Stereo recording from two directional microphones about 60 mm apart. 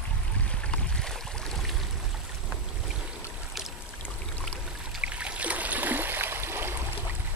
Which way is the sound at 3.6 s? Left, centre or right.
Centre.